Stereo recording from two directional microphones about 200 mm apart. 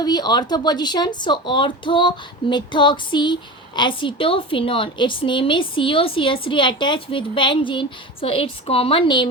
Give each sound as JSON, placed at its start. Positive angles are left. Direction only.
{"t": 0.0, "sound": "speech", "side_deg": 20}